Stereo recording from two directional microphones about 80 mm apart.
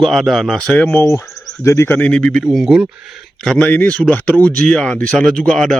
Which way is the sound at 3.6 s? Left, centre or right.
Centre.